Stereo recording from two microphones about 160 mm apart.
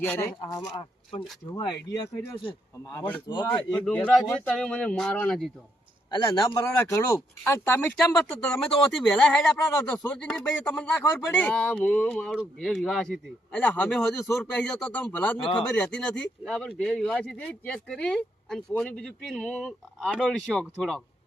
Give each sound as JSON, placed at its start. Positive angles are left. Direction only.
{"t": 0.0, "sound": "speech", "side_deg": 15}
{"t": 3.8, "sound": "speech", "side_deg": 5}
{"t": 6.1, "sound": "speech", "side_deg": 25}
{"t": 9.7, "sound": "speech", "side_deg": 15}